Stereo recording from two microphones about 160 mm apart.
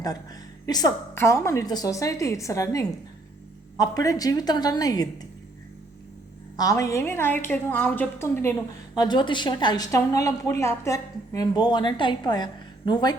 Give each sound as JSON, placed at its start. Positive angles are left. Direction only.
{"t": 0.0, "sound": "a woman's voice", "side_deg": 25}
{"t": 6.6, "sound": "a woman's voice", "side_deg": 20}
{"t": 9.0, "sound": "a woman's voice", "side_deg": 25}